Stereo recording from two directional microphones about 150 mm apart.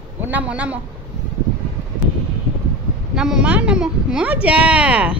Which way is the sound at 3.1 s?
5° right (ahead or behind).